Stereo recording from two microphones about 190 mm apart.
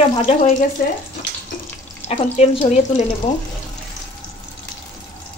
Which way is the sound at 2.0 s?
30° left (ahead or behind).